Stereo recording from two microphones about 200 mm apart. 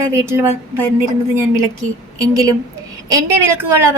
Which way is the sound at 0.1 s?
15° right (ahead or behind).